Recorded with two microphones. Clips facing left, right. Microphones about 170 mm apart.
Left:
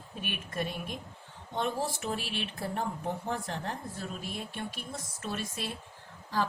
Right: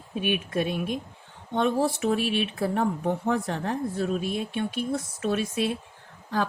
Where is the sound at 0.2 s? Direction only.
70° right (ahead or behind).